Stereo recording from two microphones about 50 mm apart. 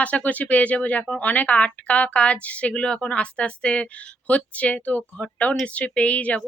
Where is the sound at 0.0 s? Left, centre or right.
Left.